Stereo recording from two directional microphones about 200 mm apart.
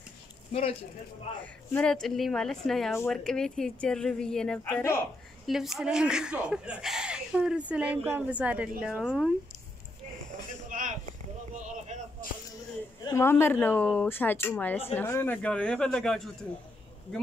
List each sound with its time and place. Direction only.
0.5 s speech: 30° left (ahead or behind)
1.4 s speech: 5° left (ahead or behind)
10.7 s a sound: 40° right (ahead or behind)
11.5 s boat: 35° right (ahead or behind)
13.0 s speech: 15° left (ahead or behind)